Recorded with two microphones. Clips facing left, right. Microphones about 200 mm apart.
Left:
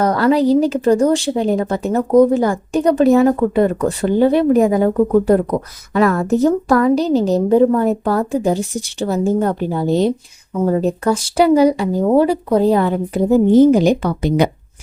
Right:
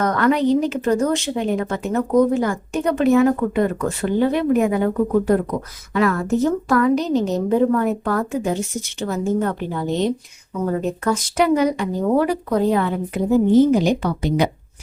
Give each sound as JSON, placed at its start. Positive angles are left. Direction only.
{"t": 0.0, "sound": "speech", "side_deg": 35}
{"t": 13.8, "sound": "speech", "side_deg": 50}